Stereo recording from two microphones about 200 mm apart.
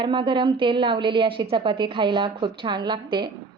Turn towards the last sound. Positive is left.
turn(degrees=-20)  # may be behind; listen again after turning